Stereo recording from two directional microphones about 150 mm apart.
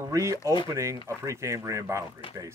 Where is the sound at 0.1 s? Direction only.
20° right (ahead or behind).